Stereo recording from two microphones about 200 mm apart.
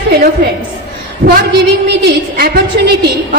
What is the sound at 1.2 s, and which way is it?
A woman's voice, 45° right (ahead or behind).